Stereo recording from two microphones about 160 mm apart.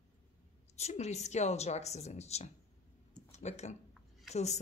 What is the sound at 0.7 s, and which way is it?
A woman's voice, 45° left (ahead or behind).